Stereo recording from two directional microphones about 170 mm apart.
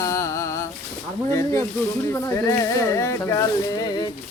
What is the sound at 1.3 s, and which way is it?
Speech, 20° left (ahead or behind).